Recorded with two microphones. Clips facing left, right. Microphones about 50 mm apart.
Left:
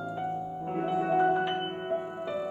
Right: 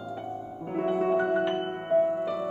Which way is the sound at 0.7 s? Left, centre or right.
Right.